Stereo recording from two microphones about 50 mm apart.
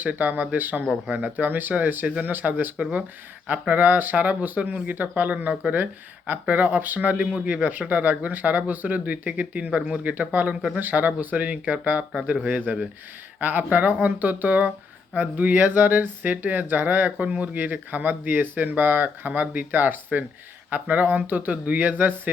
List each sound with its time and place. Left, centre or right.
0.0 s speech: right